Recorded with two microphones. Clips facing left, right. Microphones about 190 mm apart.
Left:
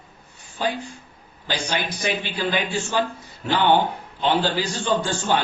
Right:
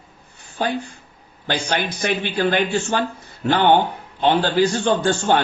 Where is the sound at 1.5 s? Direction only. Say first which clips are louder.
Right 3 dB; 55° right (ahead or behind).